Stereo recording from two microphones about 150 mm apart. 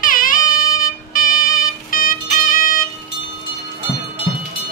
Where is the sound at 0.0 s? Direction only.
65° left (ahead or behind).